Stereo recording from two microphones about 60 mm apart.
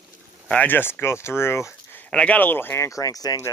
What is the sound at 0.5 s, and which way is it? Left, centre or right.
Speech, left.